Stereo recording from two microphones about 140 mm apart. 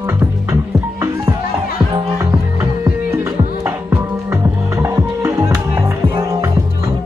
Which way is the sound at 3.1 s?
15° right (ahead or behind).